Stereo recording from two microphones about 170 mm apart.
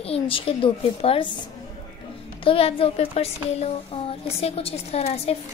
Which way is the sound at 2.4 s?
35° left (ahead or behind).